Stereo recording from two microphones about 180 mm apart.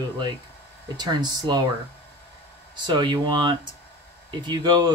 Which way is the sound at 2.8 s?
25° right (ahead or behind).